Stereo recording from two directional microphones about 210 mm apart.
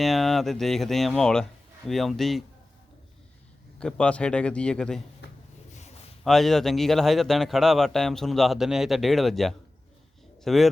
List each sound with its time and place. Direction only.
0.0 s a man's voice: centre (ahead or behind)
3.8 s a man's voice: 5° left (ahead or behind)
5.7 s a sound: 30° left (ahead or behind)
6.2 s a man's voice: centre (ahead or behind)